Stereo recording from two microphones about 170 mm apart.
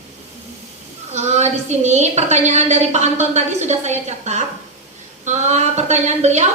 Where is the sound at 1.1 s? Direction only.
40° right (ahead or behind).